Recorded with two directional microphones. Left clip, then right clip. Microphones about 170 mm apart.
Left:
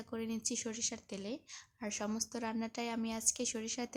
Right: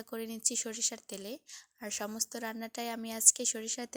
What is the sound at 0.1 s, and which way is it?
A woman's voice, 30° right (ahead or behind).